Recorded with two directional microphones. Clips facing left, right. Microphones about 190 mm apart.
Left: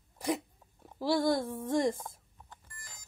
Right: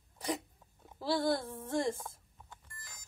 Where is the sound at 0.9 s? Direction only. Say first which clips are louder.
Left 4 dB; 15° left (ahead or behind).